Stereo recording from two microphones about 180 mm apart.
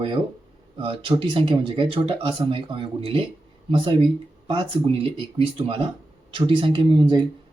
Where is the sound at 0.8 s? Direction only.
30° right (ahead or behind).